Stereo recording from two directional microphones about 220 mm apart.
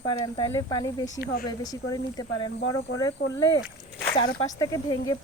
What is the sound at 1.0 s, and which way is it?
Speech, 45° left (ahead or behind).